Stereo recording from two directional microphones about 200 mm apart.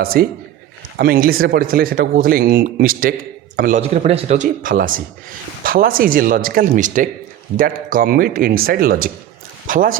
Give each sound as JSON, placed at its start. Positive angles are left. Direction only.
{"t": 0.0, "sound": "speech", "side_deg": -50}